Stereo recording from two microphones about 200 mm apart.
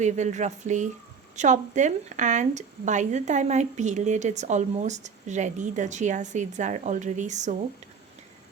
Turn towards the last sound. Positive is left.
turn(degrees=-35)  # may be behind; listen again after turning